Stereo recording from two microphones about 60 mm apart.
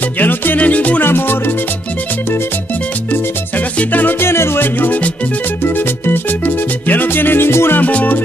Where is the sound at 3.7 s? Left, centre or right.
Left.